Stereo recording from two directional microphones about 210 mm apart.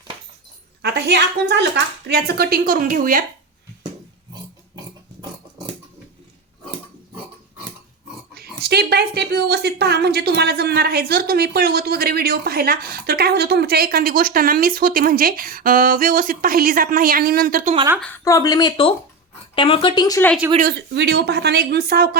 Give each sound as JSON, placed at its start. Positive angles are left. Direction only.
{"t": 0.8, "sound": "a woman's voice", "side_deg": -55}
{"t": 8.4, "sound": "a woman's voice", "side_deg": -50}
{"t": 18.0, "sound": "speech", "side_deg": 15}
{"t": 20.6, "sound": "a woman's voice", "side_deg": -50}